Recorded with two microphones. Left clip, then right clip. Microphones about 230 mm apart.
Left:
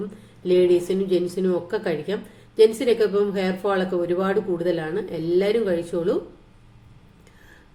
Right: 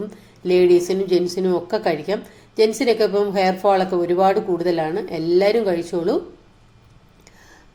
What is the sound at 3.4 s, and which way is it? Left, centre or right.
Speech, right.